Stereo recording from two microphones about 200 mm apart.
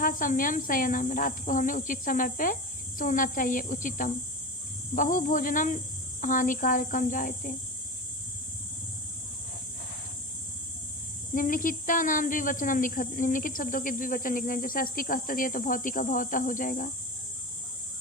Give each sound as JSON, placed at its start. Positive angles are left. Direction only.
{"t": 0.0, "sound": "speech", "side_deg": 45}
{"t": 11.3, "sound": "speech", "side_deg": 45}